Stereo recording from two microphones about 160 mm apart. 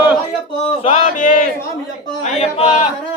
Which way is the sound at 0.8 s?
45° left (ahead or behind).